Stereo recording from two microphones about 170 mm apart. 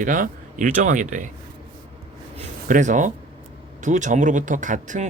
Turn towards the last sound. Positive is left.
turn(degrees=-45)  # may be behind; listen again after turning